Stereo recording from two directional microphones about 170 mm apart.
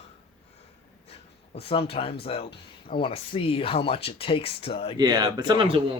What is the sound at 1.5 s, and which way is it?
Speech, 35° left (ahead or behind).